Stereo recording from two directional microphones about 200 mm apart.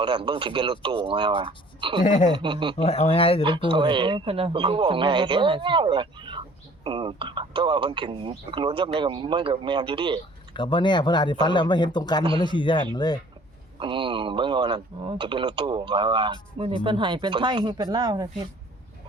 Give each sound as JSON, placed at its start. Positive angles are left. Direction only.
{"t": 0.0, "sound": "speech", "side_deg": -25}
{"t": 2.0, "sound": "speech", "side_deg": 40}
{"t": 2.3, "sound": "speech", "side_deg": -25}
{"t": 2.7, "sound": "speech", "side_deg": 30}
{"t": 3.4, "sound": "speech", "side_deg": -25}
{"t": 10.5, "sound": "speech", "side_deg": 25}
{"t": 13.7, "sound": "speech", "side_deg": -25}